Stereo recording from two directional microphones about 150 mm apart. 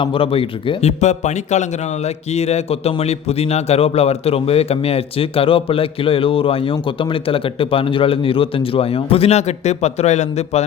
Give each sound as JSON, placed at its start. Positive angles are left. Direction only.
{"t": 0.0, "sound": "speech", "side_deg": 35}